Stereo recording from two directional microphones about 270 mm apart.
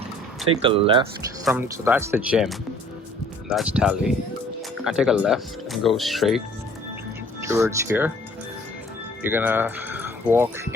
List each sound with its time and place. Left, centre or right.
0.6 s speech: centre
1.5 s speech: centre
7.4 s speech: centre
9.2 s speech: centre